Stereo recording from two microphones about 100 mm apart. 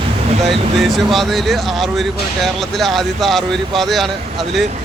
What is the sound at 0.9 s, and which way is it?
Speech, centre (ahead or behind).